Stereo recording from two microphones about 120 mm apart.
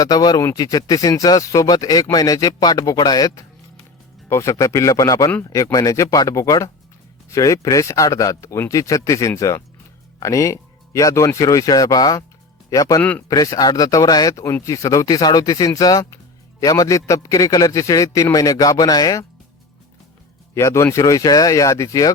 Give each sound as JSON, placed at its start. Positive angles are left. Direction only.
{"t": 0.0, "sound": "a man's voice", "side_deg": 35}
{"t": 13.0, "sound": "speech", "side_deg": 15}
{"t": 13.2, "sound": "a man's voice", "side_deg": 30}
{"t": 20.5, "sound": "a man's voice", "side_deg": 25}